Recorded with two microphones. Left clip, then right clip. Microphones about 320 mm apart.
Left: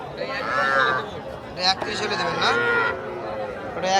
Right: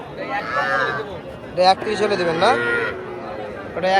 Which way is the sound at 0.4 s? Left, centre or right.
Left.